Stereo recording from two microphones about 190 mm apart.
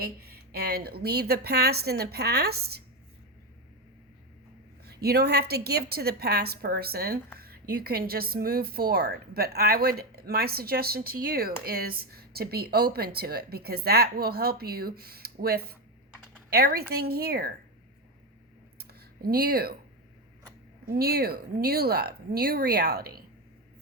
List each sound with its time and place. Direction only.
0.0 s a woman's voice: 55° right (ahead or behind)
4.9 s a woman's voice: 55° right (ahead or behind)
18.8 s a sound: 55° right (ahead or behind)
20.9 s a woman's voice: 55° right (ahead or behind)